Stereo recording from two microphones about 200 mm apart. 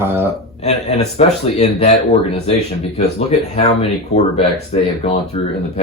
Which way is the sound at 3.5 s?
30° left (ahead or behind).